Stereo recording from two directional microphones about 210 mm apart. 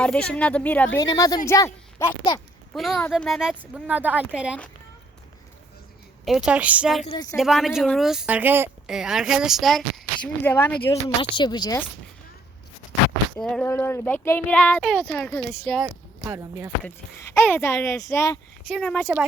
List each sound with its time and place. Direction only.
0.0 s a woman's voice: 5° left (ahead or behind)
0.9 s speech: 20° left (ahead or behind)
2.7 s a woman's voice: centre (ahead or behind)
6.2 s a woman's voice: centre (ahead or behind); by 11.8 s 20° left (ahead or behind)
13.3 s a woman's voice: 5° left (ahead or behind)
15.8 s speech: 10° right (ahead or behind)
16.8 s speech: 15° left (ahead or behind)